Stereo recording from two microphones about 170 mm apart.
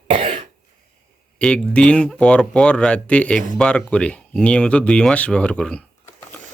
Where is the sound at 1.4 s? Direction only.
5° left (ahead or behind).